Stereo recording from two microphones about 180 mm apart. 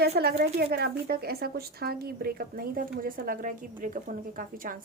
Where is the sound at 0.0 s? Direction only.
60° right (ahead or behind).